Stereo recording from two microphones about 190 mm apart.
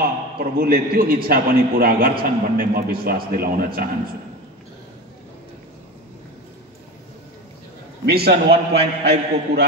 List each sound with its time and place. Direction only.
0.0 s a man's voice: 50° right (ahead or behind)
8.0 s a man's voice: 55° right (ahead or behind)